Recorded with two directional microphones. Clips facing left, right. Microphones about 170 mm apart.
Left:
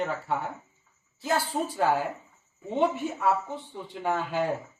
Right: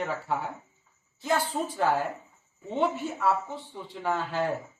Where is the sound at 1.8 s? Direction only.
10° left (ahead or behind).